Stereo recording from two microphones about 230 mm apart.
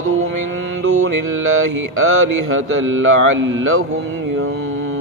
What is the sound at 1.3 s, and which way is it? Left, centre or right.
Mantra, right.